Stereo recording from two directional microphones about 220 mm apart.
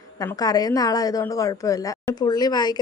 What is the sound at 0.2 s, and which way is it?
Speech, 15° left (ahead or behind).